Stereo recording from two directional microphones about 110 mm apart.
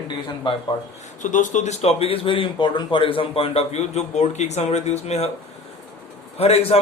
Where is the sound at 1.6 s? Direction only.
90° left.